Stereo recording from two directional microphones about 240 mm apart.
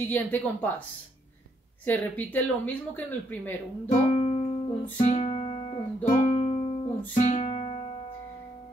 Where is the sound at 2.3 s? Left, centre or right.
Centre.